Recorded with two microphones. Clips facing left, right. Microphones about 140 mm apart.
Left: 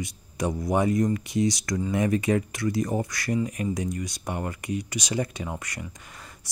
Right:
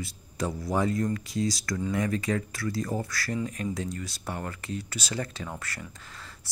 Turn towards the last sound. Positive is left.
turn(degrees=15)  # may be behind; listen again after turning